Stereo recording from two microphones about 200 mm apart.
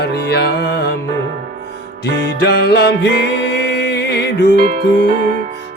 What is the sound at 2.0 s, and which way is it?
Music, 60° left (ahead or behind).